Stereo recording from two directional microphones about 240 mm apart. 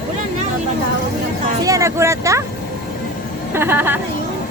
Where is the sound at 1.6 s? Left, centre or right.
Centre.